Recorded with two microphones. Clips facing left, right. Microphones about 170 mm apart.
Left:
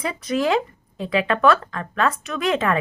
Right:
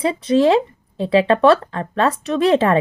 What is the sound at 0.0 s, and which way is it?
Speech, 30° right (ahead or behind).